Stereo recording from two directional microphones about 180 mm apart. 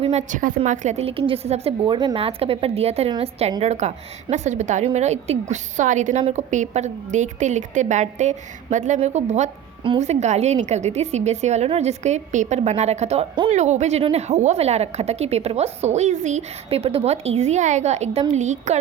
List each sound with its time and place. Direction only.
0.0 s a woman's voice: 40° right (ahead or behind)